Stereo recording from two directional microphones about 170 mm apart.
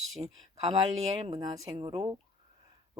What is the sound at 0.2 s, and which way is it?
Speech, 30° right (ahead or behind).